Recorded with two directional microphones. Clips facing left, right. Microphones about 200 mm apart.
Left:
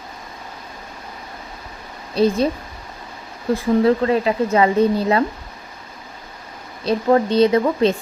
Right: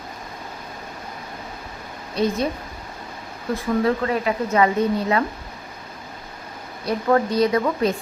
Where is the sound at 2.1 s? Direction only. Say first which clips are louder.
Left 5 dB; 30° left (ahead or behind).